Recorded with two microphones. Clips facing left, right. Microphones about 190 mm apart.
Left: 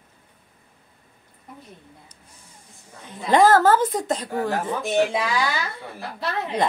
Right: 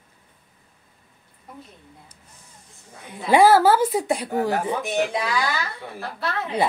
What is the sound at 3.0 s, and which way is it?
A woman's voice, 10° right (ahead or behind).